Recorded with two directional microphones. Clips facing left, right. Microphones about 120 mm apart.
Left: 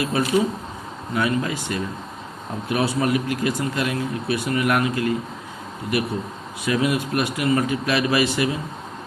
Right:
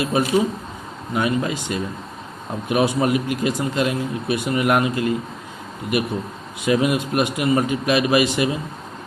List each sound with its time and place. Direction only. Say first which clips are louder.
0.1 s speech: right 2 dB; 20° right (ahead or behind)
6.6 s speech: right 3 dB; 20° right (ahead or behind)